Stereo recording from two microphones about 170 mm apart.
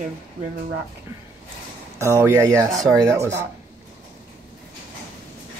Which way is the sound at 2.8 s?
5° left (ahead or behind).